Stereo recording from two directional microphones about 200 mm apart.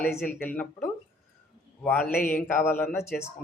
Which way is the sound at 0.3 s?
10° left (ahead or behind).